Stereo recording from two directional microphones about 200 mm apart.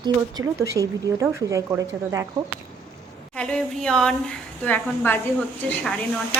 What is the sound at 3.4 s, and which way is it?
A woman's voice, 5° left (ahead or behind).